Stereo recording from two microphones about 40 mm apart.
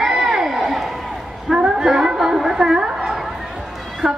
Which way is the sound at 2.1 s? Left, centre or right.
Centre.